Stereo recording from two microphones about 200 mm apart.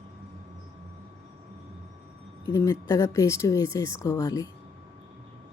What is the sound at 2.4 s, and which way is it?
Speech, 15° left (ahead or behind).